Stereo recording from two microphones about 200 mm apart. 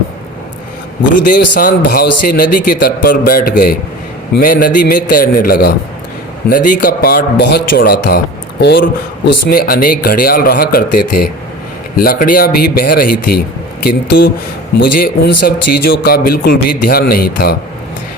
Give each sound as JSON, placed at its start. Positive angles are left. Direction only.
{"t": 1.3, "sound": "speech", "side_deg": 40}
{"t": 14.9, "sound": "speech", "side_deg": 50}